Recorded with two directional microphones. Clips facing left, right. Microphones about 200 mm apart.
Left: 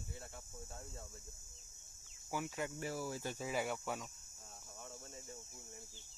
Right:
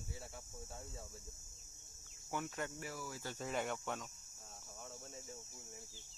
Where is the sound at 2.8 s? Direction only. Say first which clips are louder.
Left 5 dB; 30° left (ahead or behind).